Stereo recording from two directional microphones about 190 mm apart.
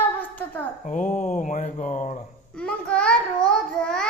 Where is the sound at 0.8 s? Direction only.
40° left (ahead or behind).